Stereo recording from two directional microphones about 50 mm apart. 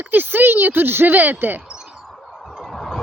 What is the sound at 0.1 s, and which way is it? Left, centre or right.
Speech, right.